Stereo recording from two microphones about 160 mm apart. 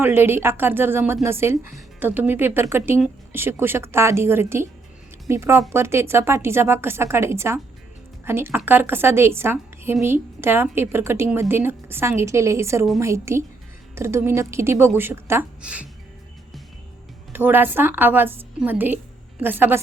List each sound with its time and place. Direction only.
0.0 s a woman's voice: 15° right (ahead or behind)
17.3 s a woman's voice: 10° right (ahead or behind)